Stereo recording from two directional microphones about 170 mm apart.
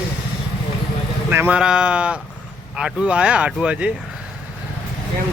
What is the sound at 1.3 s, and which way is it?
Speech, 10° right (ahead or behind).